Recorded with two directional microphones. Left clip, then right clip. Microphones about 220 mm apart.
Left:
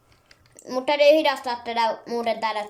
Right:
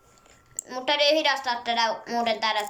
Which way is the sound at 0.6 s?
20° left (ahead or behind).